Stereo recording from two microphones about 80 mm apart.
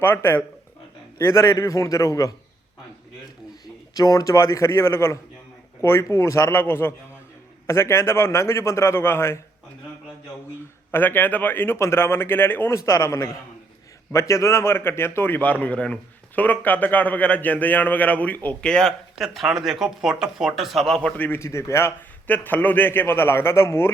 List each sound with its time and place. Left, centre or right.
0.0 s a man's voice: left
3.9 s a man's voice: left
10.9 s a man's voice: left
12.7 s a man's voice: left; by 18.9 s centre
19.2 s speech: centre
20.8 s a man's voice: centre
21.2 s a man's voice: left
21.4 s a man's voice: left
22.3 s a man's voice: left